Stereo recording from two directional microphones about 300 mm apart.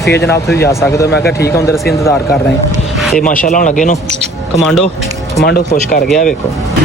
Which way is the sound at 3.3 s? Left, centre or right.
Left.